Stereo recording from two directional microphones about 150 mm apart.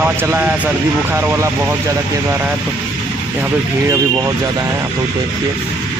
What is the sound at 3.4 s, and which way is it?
Speech, 15° right (ahead or behind).